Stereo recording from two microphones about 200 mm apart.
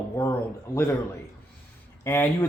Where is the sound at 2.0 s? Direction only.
10° left (ahead or behind).